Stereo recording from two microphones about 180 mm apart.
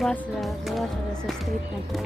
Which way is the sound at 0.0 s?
5° left (ahead or behind).